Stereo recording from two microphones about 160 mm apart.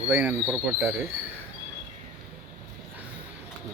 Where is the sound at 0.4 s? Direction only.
5° right (ahead or behind).